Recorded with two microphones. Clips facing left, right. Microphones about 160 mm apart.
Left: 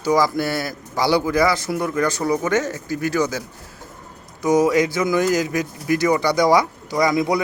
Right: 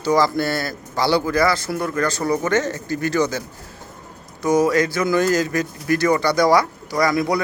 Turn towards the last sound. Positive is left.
turn(degrees=20)  # may be behind; listen again after turning